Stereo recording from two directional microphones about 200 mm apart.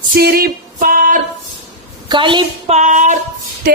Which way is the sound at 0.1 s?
50° right (ahead or behind).